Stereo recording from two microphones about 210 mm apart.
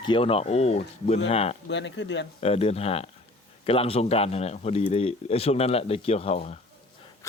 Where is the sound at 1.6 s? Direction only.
60° left (ahead or behind).